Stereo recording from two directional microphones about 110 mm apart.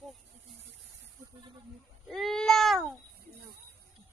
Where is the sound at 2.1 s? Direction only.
5° left (ahead or behind).